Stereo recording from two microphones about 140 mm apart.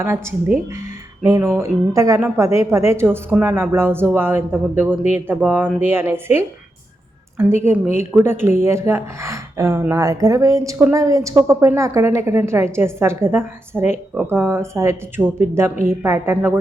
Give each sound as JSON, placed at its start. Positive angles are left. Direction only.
{"t": 0.0, "sound": "a woman's voice", "side_deg": -15}